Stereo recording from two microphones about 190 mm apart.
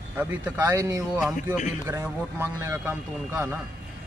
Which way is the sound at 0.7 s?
15° right (ahead or behind).